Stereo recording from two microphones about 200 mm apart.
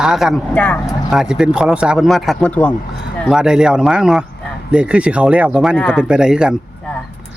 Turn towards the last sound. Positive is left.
turn(degrees=-5)  # may be behind; listen again after turning